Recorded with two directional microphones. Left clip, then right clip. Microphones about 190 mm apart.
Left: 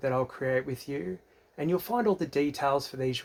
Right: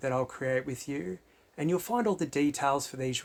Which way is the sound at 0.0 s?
15° right (ahead or behind).